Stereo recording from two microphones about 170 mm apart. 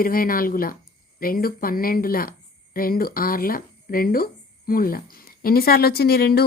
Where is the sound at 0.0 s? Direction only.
55° left (ahead or behind).